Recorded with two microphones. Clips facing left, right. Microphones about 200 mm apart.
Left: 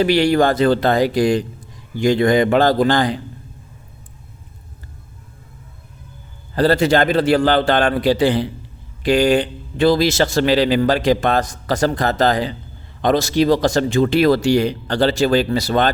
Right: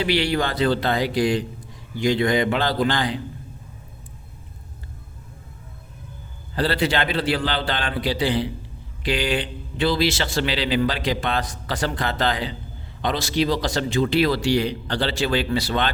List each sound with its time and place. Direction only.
0.0 s a man's voice: 45° left (ahead or behind)
6.6 s a man's voice: 45° left (ahead or behind)